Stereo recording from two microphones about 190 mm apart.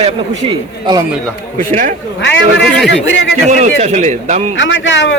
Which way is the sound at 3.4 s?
40° right (ahead or behind).